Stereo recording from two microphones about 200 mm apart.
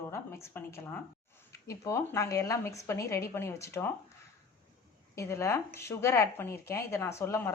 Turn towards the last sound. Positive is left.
turn(degrees=15)  # may be behind; listen again after turning